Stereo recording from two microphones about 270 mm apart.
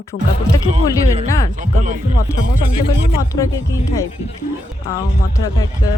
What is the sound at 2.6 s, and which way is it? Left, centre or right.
Speech, centre.